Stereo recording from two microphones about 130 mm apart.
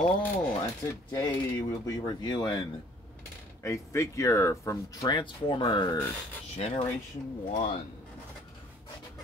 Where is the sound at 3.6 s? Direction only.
25° left (ahead or behind).